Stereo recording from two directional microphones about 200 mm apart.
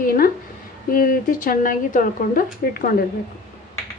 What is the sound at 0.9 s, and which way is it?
Speech, 45° left (ahead or behind).